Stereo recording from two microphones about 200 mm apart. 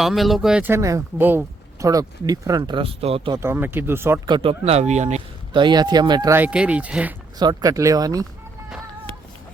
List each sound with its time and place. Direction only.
0.0 s speech: centre (ahead or behind); by 3.4 s 25° right (ahead or behind)
3.4 s speech: 10° right (ahead or behind)
4.3 s speech: 25° right (ahead or behind)
5.6 s speech: 20° right (ahead or behind)
7.3 s speech: 20° right (ahead or behind)